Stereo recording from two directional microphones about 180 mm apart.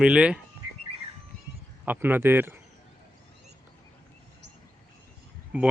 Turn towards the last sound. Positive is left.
turn(degrees=-5)  # may be behind; listen again after turning